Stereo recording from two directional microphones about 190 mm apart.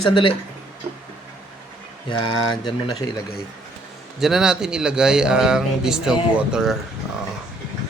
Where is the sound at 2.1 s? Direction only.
25° left (ahead or behind).